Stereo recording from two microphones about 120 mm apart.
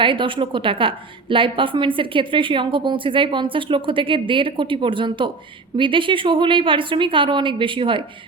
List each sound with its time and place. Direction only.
0.0 s a woman's voice: 45° right (ahead or behind)